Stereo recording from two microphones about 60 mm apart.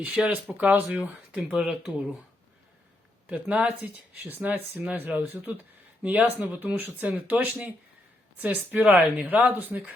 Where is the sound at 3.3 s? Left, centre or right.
Right.